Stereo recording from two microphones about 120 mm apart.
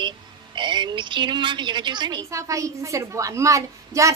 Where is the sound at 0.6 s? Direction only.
40° right (ahead or behind).